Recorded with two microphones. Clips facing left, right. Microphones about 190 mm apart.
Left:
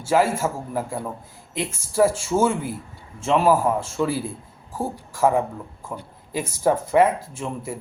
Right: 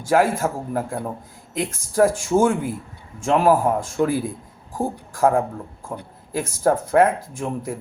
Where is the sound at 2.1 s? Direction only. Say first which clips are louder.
Right 3 dB; 15° right (ahead or behind).